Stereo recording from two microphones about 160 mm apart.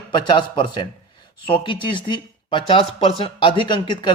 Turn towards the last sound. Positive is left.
turn(degrees=30)  # may be behind; listen again after turning